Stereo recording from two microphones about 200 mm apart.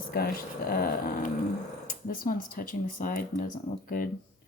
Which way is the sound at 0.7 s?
50° left (ahead or behind).